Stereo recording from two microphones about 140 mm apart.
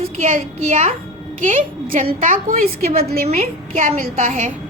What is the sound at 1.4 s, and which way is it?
Speech, 75° right (ahead or behind).